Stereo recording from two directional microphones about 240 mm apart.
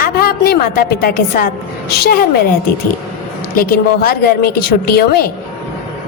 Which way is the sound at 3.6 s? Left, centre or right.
Left.